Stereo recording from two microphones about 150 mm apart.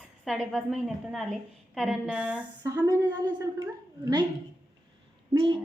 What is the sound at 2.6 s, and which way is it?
Speech, 20° right (ahead or behind).